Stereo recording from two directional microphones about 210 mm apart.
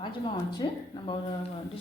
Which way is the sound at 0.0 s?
25° left (ahead or behind).